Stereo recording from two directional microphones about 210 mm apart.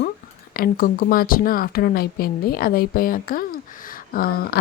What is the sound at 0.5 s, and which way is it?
Speech, 45° left (ahead or behind).